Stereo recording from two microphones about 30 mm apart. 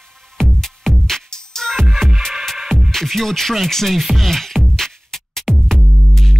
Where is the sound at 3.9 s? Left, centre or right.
Centre.